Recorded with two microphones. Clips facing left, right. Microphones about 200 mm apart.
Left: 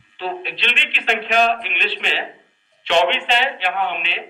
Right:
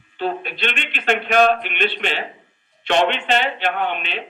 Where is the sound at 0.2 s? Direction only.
45° right (ahead or behind).